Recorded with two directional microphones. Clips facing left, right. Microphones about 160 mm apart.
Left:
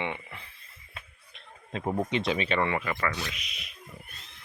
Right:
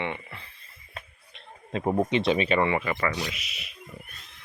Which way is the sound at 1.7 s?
40° right (ahead or behind).